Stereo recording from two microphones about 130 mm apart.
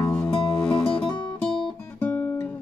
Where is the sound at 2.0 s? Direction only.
10° left (ahead or behind).